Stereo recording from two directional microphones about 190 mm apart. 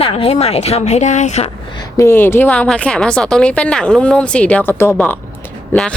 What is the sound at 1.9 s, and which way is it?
A woman's voice, 15° left (ahead or behind).